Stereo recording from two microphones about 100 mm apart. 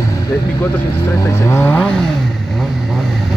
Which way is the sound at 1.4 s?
20° left (ahead or behind).